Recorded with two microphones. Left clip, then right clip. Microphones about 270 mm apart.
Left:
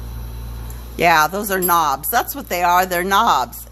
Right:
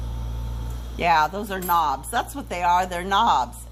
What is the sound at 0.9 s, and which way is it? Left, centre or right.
Speech, left.